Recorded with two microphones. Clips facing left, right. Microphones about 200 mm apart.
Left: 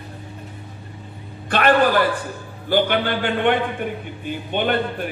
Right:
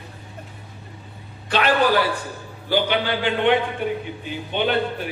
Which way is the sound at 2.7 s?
50° left (ahead or behind).